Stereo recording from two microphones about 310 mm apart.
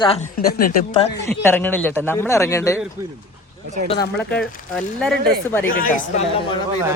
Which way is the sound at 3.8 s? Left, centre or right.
Centre.